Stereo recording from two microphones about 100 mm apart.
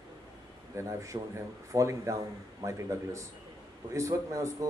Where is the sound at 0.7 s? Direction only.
30° right (ahead or behind).